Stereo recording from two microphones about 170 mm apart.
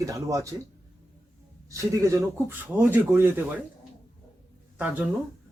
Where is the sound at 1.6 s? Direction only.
20° right (ahead or behind).